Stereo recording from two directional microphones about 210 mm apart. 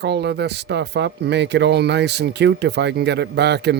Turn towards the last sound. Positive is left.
turn(degrees=-50)  # may be behind; listen again after turning